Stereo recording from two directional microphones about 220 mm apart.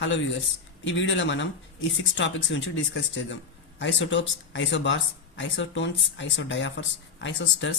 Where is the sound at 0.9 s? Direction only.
60° left (ahead or behind).